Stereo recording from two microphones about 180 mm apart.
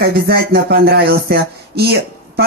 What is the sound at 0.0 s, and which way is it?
Speech, 60° right (ahead or behind).